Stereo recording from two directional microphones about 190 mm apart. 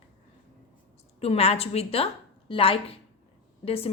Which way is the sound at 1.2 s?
30° left (ahead or behind).